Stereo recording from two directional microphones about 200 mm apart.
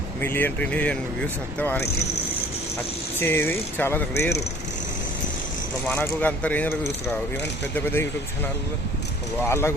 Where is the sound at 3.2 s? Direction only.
10° left (ahead or behind).